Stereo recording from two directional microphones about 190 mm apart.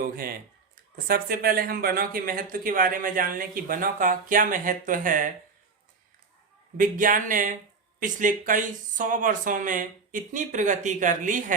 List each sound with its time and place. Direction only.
0.9 s speech: 50° right (ahead or behind)
6.7 s speech: 45° right (ahead or behind)